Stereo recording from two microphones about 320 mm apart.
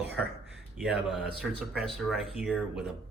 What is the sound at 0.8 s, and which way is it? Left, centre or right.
Speech, centre.